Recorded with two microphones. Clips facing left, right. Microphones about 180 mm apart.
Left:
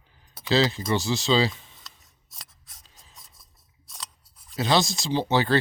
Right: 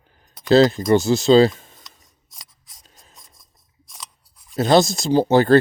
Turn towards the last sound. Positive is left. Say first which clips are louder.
# right 8 dB
turn(degrees=-45)  # may be behind; listen again after turning